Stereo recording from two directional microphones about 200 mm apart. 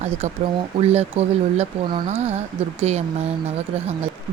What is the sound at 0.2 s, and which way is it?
Speech, 35° right (ahead or behind).